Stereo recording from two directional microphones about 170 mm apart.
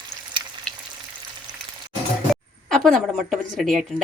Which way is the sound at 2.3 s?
Centre (ahead or behind).